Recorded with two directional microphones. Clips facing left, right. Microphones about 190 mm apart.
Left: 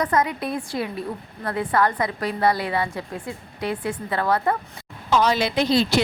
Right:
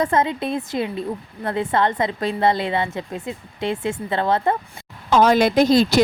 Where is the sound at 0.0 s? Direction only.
25° right (ahead or behind).